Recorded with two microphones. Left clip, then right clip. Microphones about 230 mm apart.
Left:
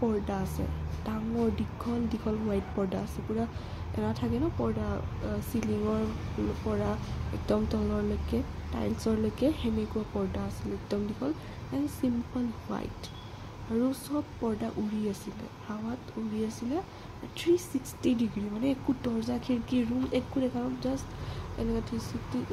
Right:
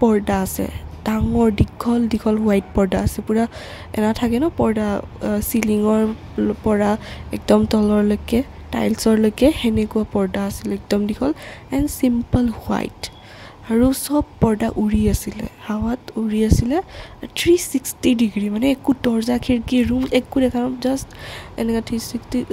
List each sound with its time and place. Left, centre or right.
0.0 s speech: right